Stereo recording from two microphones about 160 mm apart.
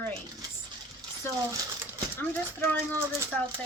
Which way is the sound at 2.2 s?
15° left (ahead or behind).